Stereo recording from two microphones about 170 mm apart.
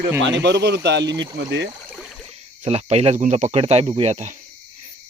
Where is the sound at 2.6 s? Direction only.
35° right (ahead or behind).